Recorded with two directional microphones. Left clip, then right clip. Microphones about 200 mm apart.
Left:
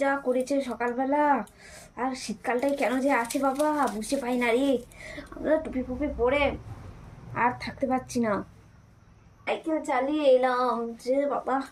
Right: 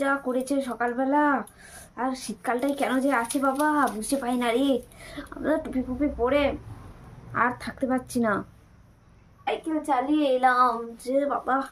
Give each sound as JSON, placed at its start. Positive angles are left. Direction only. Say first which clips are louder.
{"t": 0.0, "sound": "speech", "louder": "even", "side_deg": -20}
{"t": 9.8, "sound": "speech", "louder": "even", "side_deg": -15}